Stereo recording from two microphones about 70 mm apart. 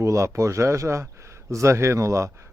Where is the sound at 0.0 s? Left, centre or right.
Right.